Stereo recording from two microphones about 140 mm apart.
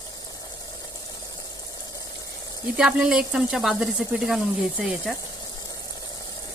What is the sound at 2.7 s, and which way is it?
Speech, 5° right (ahead or behind).